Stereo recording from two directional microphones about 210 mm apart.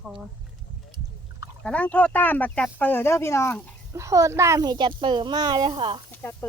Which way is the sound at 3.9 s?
15° right (ahead or behind).